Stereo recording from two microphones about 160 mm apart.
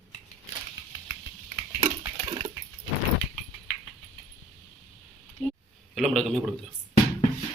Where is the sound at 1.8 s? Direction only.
25° right (ahead or behind).